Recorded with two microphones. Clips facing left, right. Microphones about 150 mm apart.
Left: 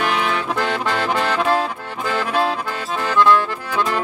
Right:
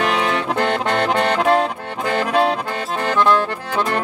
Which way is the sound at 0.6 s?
70° right (ahead or behind).